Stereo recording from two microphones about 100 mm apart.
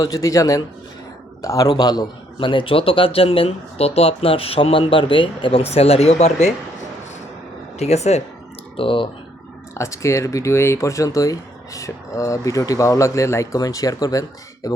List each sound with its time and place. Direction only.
0.0 s a man's voice: 35° left (ahead or behind); by 6.3 s 90° left
7.8 s speech: 90° left
8.7 s speech: 60° left (ahead or behind)
9.7 s speech: 30° left (ahead or behind)